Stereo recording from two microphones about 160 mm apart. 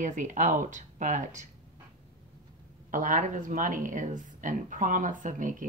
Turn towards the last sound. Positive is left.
turn(degrees=-55)  # may be behind; listen again after turning